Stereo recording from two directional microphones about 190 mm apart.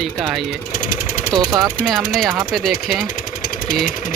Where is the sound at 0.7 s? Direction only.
45° left (ahead or behind).